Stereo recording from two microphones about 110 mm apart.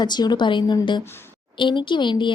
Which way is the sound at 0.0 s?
40° left (ahead or behind).